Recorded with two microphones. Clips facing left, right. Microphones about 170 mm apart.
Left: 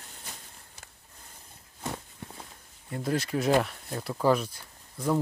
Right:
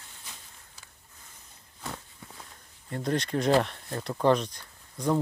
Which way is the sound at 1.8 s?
25° left (ahead or behind).